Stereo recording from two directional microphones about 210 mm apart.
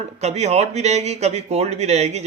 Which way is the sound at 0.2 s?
30° right (ahead or behind).